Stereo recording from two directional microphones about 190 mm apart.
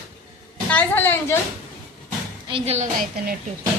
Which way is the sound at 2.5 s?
30° right (ahead or behind).